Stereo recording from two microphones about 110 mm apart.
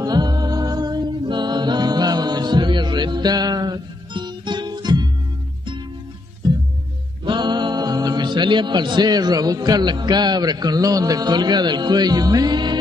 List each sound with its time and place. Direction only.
0.0 s a capella: 35° right (ahead or behind)
7.2 s speech: 45° right (ahead or behind)